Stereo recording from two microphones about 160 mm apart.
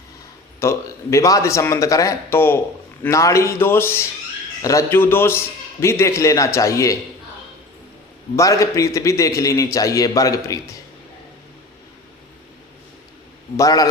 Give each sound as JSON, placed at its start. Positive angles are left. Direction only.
{"t": 0.6, "sound": "a man's voice", "side_deg": 15}
{"t": 8.4, "sound": "speech", "side_deg": 20}
{"t": 13.6, "sound": "speech", "side_deg": 20}